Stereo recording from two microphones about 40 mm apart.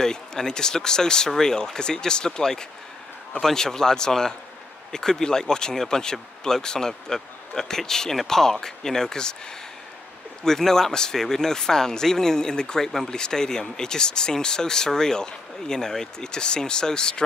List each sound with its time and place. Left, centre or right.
0.0 s speech: centre
10.4 s speech: centre